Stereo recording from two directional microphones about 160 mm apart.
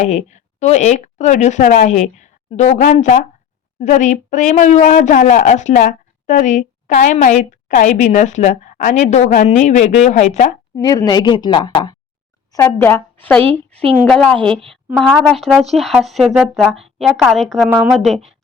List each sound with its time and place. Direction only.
0.0 s a woman's voice: 45° left (ahead or behind)
10.8 s speech: 25° left (ahead or behind)
12.5 s a woman's voice: 15° left (ahead or behind); by 18.3 s centre (ahead or behind)